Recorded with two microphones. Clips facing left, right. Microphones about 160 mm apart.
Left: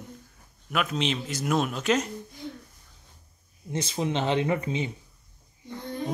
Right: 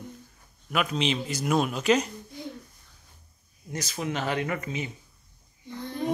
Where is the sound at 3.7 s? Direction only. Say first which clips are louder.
Left 3 dB; 30° left (ahead or behind).